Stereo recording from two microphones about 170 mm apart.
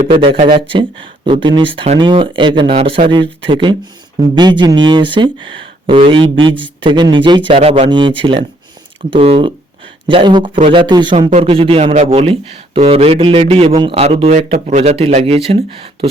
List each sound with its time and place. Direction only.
0.1 s speech: 30° right (ahead or behind)
11.3 s speech: 40° right (ahead or behind)